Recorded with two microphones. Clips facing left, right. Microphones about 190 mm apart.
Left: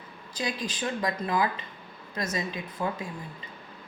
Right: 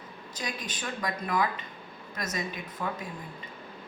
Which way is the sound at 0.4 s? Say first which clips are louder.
Left 5 dB; 25° left (ahead or behind).